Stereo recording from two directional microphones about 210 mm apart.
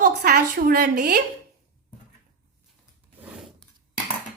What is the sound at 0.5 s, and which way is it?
Speech, 45° right (ahead or behind).